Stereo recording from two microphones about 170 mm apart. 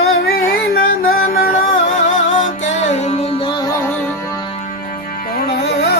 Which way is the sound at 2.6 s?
40° left (ahead or behind).